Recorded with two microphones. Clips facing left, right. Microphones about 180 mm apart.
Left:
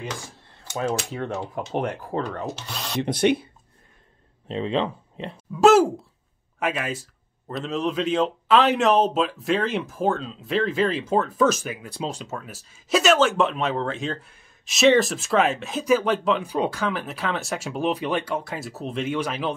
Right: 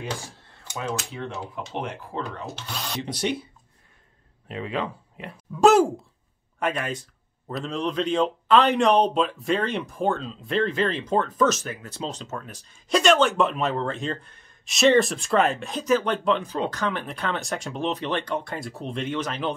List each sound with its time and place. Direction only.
1.1 s speech: 50° left (ahead or behind)
3.0 s speech: 55° left (ahead or behind)
4.5 s speech: 25° left (ahead or behind)
5.5 s a sound: centre (ahead or behind)
6.6 s speech: 5° left (ahead or behind)
16.5 s speech: 15° left (ahead or behind)